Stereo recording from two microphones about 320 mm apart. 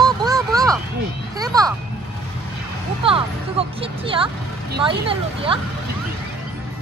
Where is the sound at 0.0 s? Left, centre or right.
Centre.